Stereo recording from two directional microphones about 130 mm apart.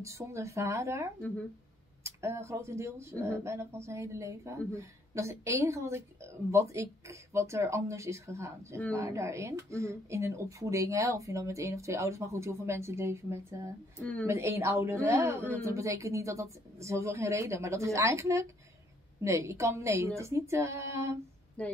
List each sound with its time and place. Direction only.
0.2 s a woman's voice: 20° right (ahead or behind)
21.6 s a woman's voice: 10° left (ahead or behind)